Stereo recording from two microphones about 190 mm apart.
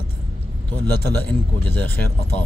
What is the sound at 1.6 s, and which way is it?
Speech, 10° left (ahead or behind).